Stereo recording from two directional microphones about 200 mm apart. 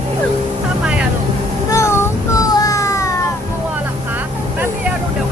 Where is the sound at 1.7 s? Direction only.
15° left (ahead or behind).